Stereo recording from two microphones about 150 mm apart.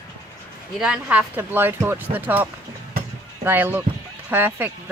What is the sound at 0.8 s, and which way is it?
Speech, 10° right (ahead or behind).